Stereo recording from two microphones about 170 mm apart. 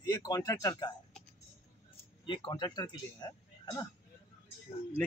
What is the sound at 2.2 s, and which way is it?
Speech, 30° left (ahead or behind).